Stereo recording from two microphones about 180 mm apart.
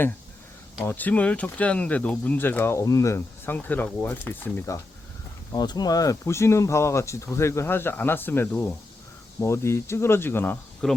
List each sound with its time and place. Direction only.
0.9 s speech: 10° left (ahead or behind)